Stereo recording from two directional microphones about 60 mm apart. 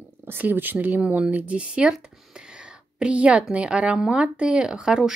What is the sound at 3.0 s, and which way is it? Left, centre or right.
Speech, centre.